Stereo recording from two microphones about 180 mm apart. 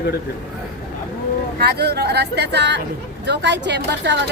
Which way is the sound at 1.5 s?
65° right (ahead or behind).